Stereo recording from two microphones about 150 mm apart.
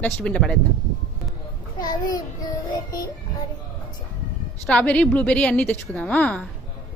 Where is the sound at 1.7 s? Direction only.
25° left (ahead or behind).